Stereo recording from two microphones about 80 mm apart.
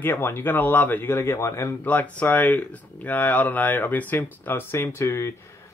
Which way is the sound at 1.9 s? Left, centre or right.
Centre.